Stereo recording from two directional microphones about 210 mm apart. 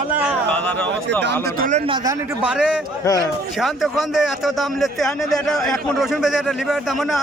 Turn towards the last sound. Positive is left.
turn(degrees=0)  # may be behind; listen again after turning